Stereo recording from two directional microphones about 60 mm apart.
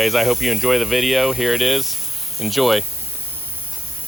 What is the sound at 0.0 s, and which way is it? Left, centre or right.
Speech, centre.